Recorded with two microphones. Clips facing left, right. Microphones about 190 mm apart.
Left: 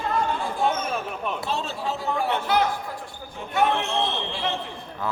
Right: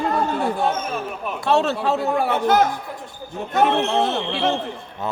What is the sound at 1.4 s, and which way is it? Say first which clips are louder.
Speech: right 9 dB; 70° right (ahead or behind).